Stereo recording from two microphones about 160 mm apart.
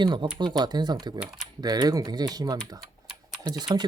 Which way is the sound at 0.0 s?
30° right (ahead or behind).